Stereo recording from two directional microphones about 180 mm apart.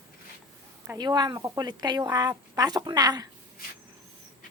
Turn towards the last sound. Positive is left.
turn(degrees=-20)  # may be behind; listen again after turning